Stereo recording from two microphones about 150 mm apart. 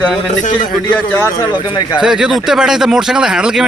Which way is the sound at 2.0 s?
5° right (ahead or behind).